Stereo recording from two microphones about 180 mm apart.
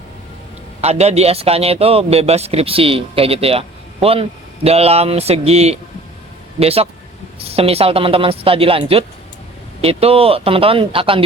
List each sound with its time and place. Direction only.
0.8 s speech: 35° right (ahead or behind)